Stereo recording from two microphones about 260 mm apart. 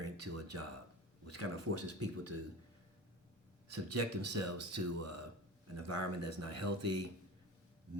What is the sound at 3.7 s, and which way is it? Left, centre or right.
Speech, right.